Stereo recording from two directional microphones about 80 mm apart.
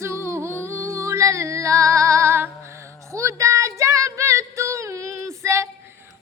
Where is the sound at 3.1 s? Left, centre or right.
Right.